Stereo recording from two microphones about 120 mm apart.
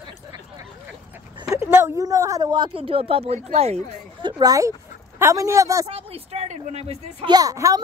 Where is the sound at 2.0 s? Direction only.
30° right (ahead or behind); by 3.9 s 60° right (ahead or behind).